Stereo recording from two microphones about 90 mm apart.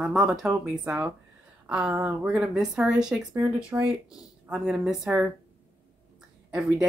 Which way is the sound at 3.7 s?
25° right (ahead or behind).